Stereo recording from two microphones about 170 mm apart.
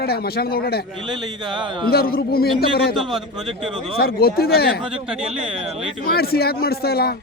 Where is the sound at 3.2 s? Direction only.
5° right (ahead or behind).